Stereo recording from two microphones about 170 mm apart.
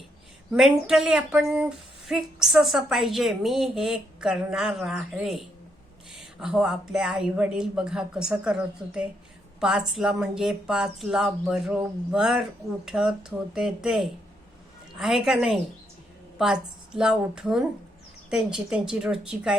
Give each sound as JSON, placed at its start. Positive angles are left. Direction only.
{"t": 0.5, "sound": "a woman's voice", "side_deg": -5}